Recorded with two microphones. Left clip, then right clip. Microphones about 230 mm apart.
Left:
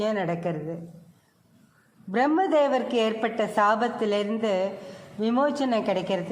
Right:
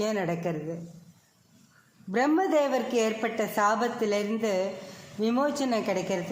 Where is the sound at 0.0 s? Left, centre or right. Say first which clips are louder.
Left 2 dB; centre.